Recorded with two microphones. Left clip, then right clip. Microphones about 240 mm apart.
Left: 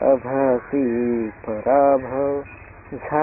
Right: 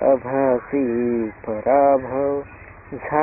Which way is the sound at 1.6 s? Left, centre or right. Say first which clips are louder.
Even; centre.